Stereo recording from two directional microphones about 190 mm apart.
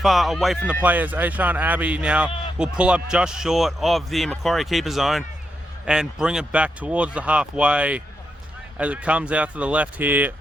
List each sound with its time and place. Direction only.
0.0 s speech: centre (ahead or behind)